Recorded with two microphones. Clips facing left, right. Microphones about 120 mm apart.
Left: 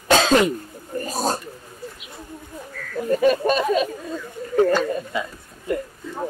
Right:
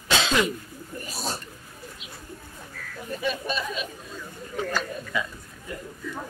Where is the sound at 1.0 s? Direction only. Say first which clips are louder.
Left 10 dB; 45° left (ahead or behind).